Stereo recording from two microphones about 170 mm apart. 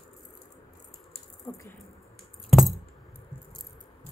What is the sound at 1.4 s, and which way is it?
Keys jangling, 20° left (ahead or behind).